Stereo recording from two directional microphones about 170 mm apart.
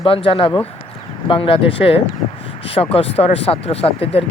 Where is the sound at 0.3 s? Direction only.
30° left (ahead or behind).